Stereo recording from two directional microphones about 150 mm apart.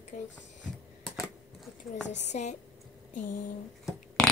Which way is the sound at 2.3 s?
50° left (ahead or behind).